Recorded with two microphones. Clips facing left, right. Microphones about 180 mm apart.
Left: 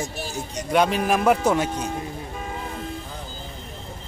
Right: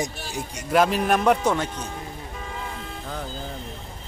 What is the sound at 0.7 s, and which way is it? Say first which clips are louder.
Speech: even; centre (ahead or behind).